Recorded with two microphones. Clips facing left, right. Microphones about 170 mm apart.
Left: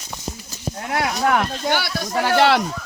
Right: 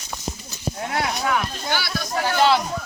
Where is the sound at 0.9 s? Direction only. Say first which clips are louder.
Left 5 dB; 55° left (ahead or behind).